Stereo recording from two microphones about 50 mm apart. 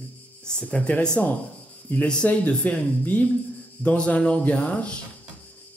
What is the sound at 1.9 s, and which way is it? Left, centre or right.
Cricket, left.